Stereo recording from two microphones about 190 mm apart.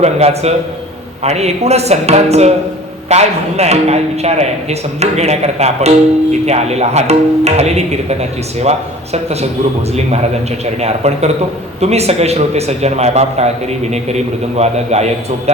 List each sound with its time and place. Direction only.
0.0 s a man's voice: 35° right (ahead or behind)